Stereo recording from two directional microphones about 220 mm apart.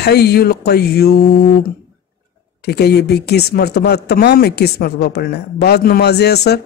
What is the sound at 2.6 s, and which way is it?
A man's voice, 45° left (ahead or behind).